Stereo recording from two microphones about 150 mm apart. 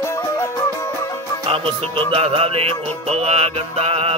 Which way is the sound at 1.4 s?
40° right (ahead or behind).